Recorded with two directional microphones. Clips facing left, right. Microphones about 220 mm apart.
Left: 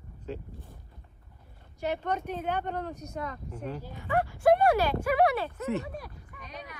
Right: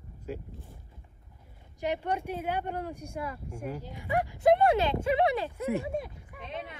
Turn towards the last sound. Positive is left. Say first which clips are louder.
# right 4 dB
turn(degrees=-25)  # may be behind; listen again after turning